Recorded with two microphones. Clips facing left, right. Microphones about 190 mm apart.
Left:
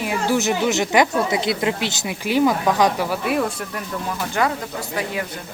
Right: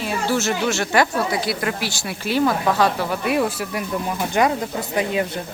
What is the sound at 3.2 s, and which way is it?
Speech, 5° right (ahead or behind).